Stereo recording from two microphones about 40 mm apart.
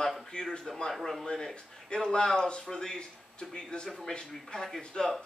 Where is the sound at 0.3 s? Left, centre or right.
Centre.